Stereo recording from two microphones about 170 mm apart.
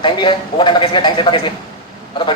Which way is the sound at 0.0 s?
30° left (ahead or behind).